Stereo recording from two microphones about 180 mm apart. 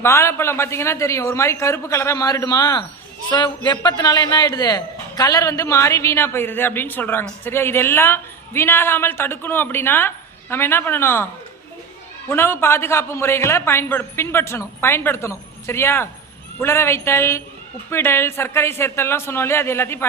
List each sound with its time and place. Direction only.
0.0 s a man's voice: 15° left (ahead or behind)
12.3 s a man's voice: 15° left (ahead or behind)